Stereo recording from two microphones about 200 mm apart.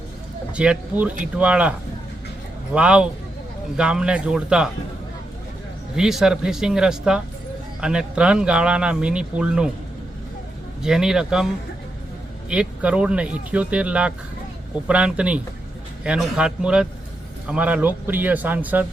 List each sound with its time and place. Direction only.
0.5 s a man's voice: 5° right (ahead or behind)
2.7 s speech: 5° right (ahead or behind)
6.0 s speech: centre (ahead or behind)
10.8 s speech: 5° right (ahead or behind)
12.5 s a man's voice: 5° right (ahead or behind)